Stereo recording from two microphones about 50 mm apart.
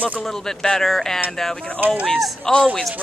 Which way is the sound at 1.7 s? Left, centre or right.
Right.